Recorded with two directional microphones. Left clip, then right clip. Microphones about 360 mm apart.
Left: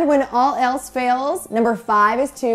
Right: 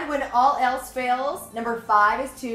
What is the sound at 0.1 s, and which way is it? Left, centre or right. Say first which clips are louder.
A woman's voice: left 4 dB; left.